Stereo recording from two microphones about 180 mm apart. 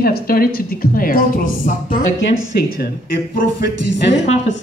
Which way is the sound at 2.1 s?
90° left.